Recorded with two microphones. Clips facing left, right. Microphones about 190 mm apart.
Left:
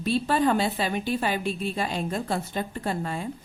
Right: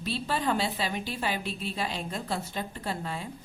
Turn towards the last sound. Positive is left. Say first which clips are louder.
# left 5 dB
turn(degrees=50)  # may be behind; listen again after turning